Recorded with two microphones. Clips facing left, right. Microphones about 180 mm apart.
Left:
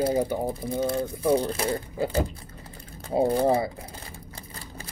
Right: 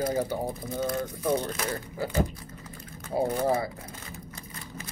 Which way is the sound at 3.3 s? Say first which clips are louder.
Left 4 dB; 30° left (ahead or behind).